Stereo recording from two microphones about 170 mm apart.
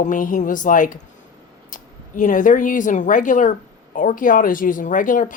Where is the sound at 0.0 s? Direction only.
50° left (ahead or behind).